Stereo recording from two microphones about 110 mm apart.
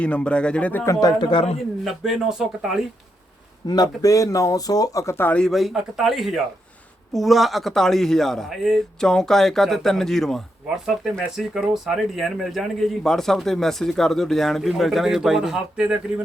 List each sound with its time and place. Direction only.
0.0 s speech: 10° left (ahead or behind)
0.9 s speech: 35° left (ahead or behind)
1.8 s speech: 5° right (ahead or behind)
3.7 s speech: 35° left (ahead or behind)
5.4 s speech: centre (ahead or behind)